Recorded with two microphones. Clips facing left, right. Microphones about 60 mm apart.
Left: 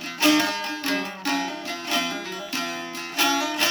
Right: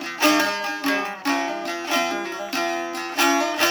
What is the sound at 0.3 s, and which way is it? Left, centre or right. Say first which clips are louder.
Music: right 1 dB; right.